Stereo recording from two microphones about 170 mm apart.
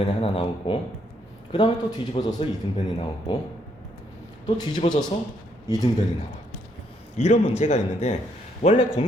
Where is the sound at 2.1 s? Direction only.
30° left (ahead or behind).